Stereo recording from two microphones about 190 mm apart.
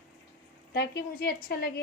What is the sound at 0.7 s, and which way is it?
A woman's voice, 60° left (ahead or behind).